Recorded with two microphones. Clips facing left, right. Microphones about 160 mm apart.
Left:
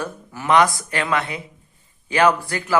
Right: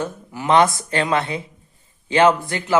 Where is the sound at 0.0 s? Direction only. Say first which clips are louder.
Right 3 dB; 15° right (ahead or behind).